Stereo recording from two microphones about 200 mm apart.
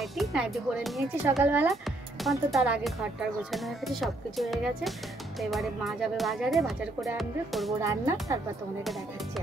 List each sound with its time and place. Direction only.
0.0 s speech: centre (ahead or behind)
7.8 s speech: 15° right (ahead or behind)